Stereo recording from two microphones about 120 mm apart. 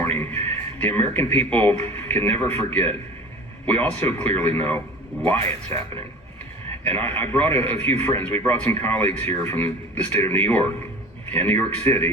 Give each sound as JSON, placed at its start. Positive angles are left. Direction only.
{"t": 0.0, "sound": "a sound", "side_deg": 20}
{"t": 0.8, "sound": "a man's voice", "side_deg": 15}
{"t": 6.8, "sound": "a man's voice", "side_deg": 15}